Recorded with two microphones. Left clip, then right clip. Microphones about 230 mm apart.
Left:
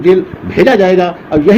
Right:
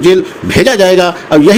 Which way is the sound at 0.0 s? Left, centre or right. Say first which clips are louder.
Right 1 dB; right.